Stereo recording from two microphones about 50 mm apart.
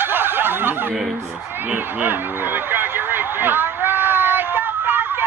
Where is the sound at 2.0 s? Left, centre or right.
Right.